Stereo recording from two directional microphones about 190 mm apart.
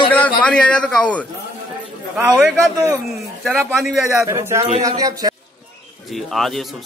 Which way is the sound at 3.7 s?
Centre (ahead or behind).